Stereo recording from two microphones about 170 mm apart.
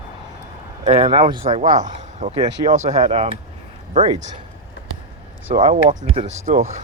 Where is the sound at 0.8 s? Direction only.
30° right (ahead or behind).